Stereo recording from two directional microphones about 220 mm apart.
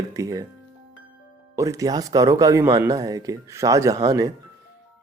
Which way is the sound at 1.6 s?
15° right (ahead or behind).